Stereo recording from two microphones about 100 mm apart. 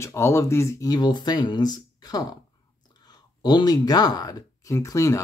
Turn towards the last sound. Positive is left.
turn(degrees=35)  # may be behind; listen again after turning